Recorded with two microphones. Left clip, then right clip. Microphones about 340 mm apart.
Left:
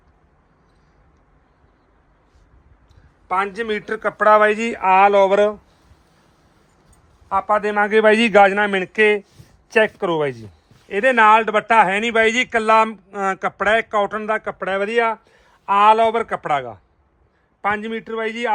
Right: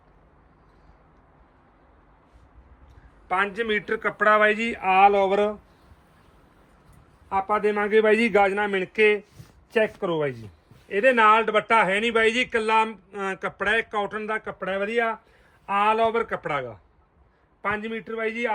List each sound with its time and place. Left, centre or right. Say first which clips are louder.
3.2 s speech: left 3 dB; centre
7.3 s speech: left 5 dB; left